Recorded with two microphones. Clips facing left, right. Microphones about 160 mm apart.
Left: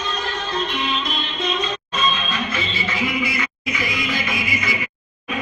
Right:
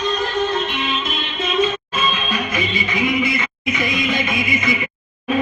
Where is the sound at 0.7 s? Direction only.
Centre (ahead or behind); by 4.7 s 20° right (ahead or behind).